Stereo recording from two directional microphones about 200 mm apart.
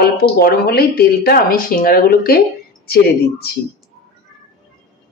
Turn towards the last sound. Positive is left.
turn(degrees=50)  # may be behind; listen again after turning